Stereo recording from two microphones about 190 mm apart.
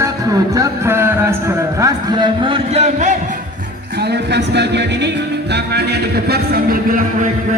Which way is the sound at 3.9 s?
60° right (ahead or behind).